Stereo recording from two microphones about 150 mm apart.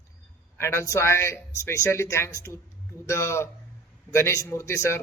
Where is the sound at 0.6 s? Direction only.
20° left (ahead or behind).